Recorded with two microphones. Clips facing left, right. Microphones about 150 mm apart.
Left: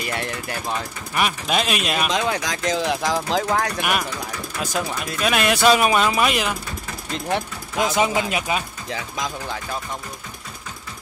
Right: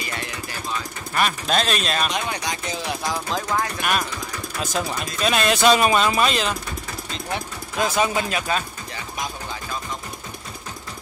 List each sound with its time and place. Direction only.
0.1 s speech: 60° left (ahead or behind)
1.1 s speech: 10° left (ahead or behind)
2.0 s speech: 90° left; by 3.8 s 70° left (ahead or behind)
5.2 s speech: 10° left (ahead or behind)
7.7 s speech: 20° left (ahead or behind)
8.9 s speech: 90° left